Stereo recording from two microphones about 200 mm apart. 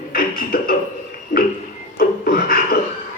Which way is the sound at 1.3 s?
40° left (ahead or behind).